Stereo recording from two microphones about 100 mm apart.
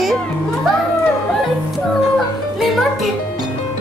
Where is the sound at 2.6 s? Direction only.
Centre (ahead or behind).